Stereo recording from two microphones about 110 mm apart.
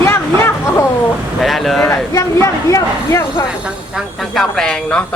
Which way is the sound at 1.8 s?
25° left (ahead or behind).